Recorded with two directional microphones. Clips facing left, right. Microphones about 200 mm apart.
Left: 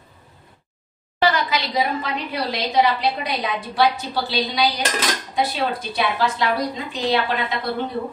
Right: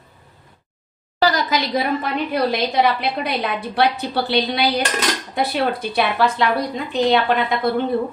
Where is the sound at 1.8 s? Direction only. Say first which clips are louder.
Right 2 dB; 55° right (ahead or behind).